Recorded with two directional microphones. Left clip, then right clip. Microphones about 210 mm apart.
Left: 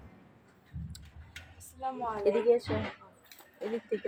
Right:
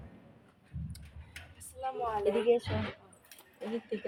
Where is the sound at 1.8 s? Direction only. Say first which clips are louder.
Right 1 dB; 15° right (ahead or behind).